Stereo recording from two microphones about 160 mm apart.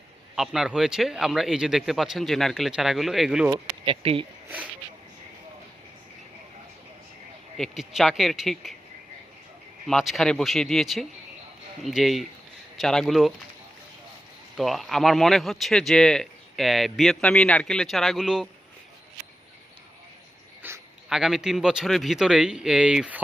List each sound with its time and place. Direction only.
0.3 s speech: 5° right (ahead or behind)
3.8 s speech: 35° right (ahead or behind)
4.4 s speech: 10° right (ahead or behind)
7.5 s speech: centre (ahead or behind)
9.8 s speech: centre (ahead or behind)
14.5 s speech: centre (ahead or behind)
20.6 s dog: 15° right (ahead or behind)
21.1 s speech: 5° right (ahead or behind)